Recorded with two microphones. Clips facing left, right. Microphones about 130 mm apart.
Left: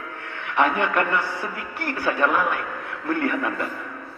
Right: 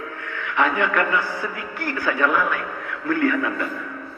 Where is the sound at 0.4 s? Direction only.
20° left (ahead or behind).